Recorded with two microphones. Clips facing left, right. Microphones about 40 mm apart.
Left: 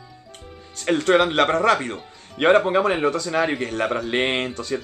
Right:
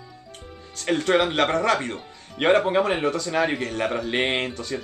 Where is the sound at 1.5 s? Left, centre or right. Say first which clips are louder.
Left 3 dB; left.